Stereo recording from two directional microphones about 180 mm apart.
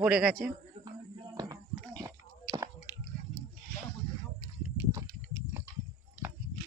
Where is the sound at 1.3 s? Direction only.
20° right (ahead or behind).